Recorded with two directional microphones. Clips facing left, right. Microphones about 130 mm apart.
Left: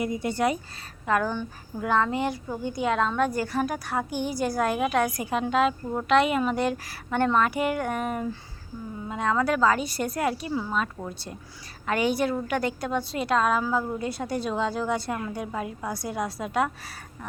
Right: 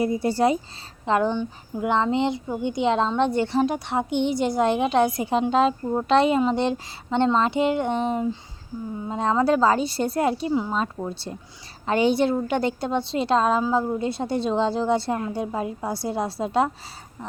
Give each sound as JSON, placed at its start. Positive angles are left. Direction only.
{"t": 0.0, "sound": "a woman's voice", "side_deg": -35}